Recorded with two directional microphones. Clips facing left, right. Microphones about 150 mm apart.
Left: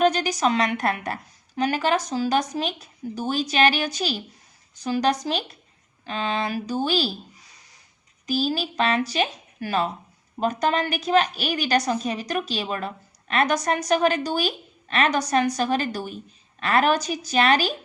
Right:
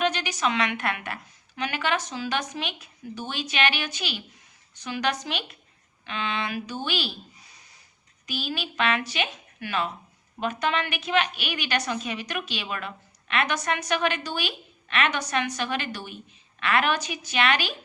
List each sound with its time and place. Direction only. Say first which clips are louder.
0.0 s a woman's voice: left 6 dB; 40° left (ahead or behind)
8.3 s a woman's voice: left 8 dB; 35° left (ahead or behind)